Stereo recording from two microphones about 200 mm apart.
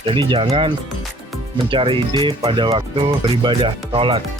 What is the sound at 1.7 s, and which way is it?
Speech, 25° right (ahead or behind).